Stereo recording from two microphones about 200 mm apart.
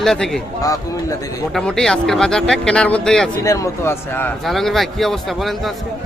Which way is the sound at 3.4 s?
15° left (ahead or behind).